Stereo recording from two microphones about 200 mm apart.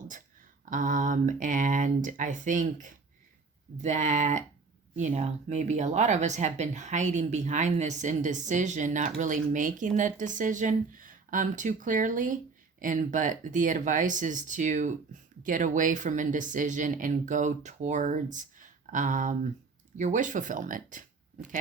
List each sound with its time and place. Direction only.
0.6 s speech: 40° right (ahead or behind)